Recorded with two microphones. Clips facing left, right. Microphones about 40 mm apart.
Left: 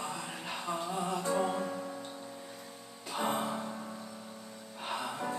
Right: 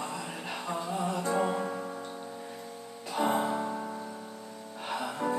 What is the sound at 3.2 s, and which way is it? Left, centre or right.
Music, centre.